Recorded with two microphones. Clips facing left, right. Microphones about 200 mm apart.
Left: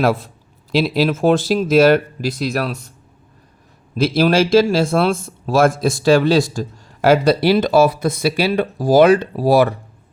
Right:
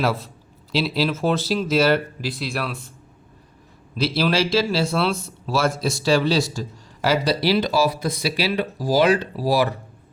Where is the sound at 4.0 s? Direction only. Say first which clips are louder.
Left 6 dB; 50° left (ahead or behind).